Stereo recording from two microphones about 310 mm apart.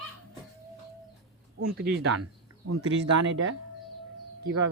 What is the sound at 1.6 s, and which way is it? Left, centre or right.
Speech, right.